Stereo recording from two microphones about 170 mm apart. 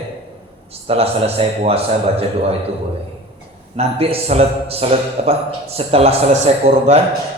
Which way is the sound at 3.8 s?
35° right (ahead or behind).